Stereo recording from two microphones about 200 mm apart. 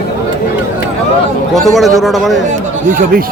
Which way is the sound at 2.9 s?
45° right (ahead or behind).